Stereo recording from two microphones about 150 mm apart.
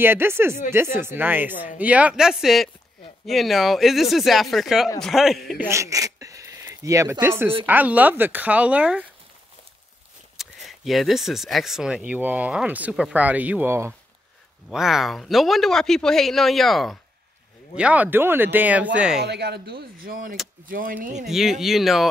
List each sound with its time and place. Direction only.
0.0 s speech: 15° right (ahead or behind)
5.7 s speech: 20° right (ahead or behind)
10.3 s speech: centre (ahead or behind)
14.7 s speech: 5° right (ahead or behind)
17.7 s speech: 10° right (ahead or behind)
19.2 s speech: 90° right; by 21.1 s 65° right (ahead or behind)
21.3 s speech: centre (ahead or behind)